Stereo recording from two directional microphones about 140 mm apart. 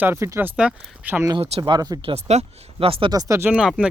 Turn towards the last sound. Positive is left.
turn(degrees=-5)  # may be behind; listen again after turning